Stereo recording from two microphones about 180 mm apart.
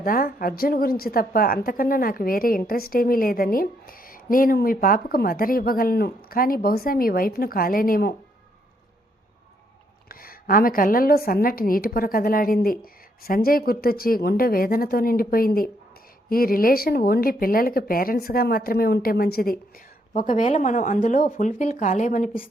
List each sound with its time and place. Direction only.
0.0 s a woman's voice: 55° left (ahead or behind)
10.1 s a woman's voice: 55° left (ahead or behind)
20.1 s a woman's voice: 45° left (ahead or behind)